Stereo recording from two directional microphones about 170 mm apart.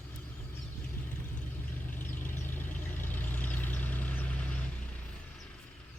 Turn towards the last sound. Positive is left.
turn(degrees=10)  # may be behind; listen again after turning